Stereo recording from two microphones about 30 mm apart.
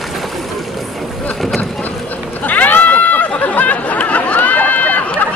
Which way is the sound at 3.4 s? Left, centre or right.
Left.